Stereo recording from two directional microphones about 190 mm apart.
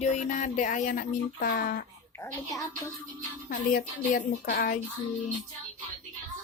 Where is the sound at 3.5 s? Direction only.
50° left (ahead or behind).